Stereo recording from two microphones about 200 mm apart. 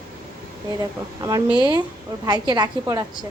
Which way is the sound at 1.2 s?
20° right (ahead or behind).